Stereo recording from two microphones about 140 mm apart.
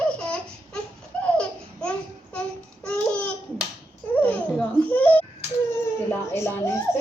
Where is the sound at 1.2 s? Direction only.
5° left (ahead or behind).